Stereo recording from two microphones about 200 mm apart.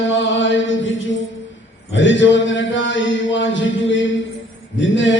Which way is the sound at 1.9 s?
65° left (ahead or behind).